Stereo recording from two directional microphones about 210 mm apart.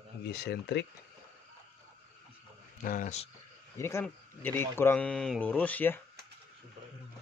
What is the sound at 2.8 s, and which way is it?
Speech, 40° left (ahead or behind).